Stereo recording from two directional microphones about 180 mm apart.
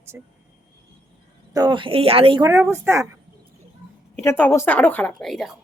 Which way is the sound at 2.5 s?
15° right (ahead or behind).